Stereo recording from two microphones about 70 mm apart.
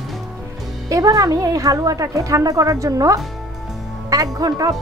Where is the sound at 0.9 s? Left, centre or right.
Right.